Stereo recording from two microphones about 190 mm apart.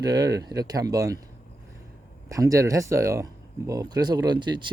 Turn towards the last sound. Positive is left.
turn(degrees=-25)  # may be behind; listen again after turning